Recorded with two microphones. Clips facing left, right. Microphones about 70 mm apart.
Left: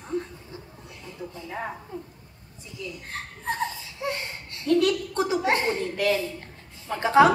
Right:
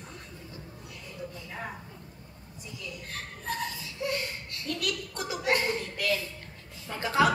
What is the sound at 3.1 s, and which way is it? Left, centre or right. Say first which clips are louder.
A woman's voice: left 4 dB; left.